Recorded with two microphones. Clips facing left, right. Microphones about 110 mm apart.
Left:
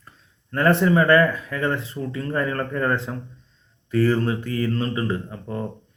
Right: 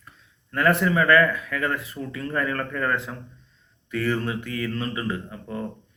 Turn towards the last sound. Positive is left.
turn(degrees=35)  # may be behind; listen again after turning